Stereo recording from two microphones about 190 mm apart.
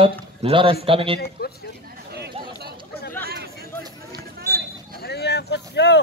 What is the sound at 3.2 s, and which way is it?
Chatter, 55° right (ahead or behind).